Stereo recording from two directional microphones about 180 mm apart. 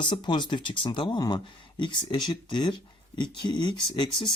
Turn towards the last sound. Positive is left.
turn(degrees=25)  # may be behind; listen again after turning